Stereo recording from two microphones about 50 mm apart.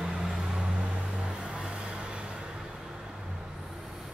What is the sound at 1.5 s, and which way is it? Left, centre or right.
Vehicle, centre.